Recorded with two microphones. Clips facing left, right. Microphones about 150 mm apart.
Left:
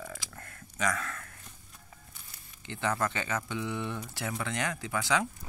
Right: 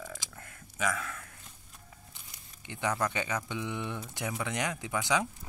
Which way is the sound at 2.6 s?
15° right (ahead or behind).